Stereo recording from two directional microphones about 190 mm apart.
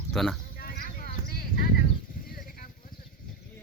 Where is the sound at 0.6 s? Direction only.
50° left (ahead or behind).